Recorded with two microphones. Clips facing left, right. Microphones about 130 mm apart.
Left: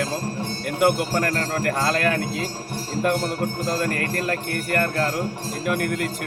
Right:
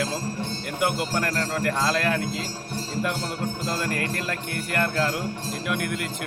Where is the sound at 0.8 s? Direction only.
50° left (ahead or behind).